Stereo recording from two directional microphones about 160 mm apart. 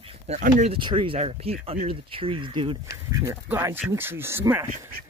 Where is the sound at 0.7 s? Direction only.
30° right (ahead or behind).